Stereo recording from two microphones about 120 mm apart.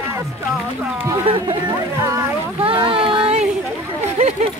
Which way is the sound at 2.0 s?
20° right (ahead or behind).